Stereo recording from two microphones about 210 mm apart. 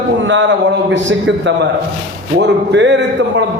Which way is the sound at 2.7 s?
60° right (ahead or behind).